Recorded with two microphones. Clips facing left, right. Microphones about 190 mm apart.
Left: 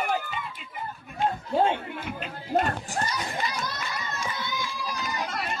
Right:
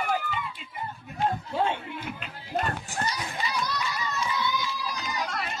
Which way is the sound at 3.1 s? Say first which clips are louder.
Left 1 dB; 50° left (ahead or behind).